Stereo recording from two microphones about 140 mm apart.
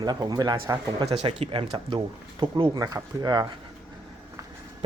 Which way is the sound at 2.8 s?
25° right (ahead or behind).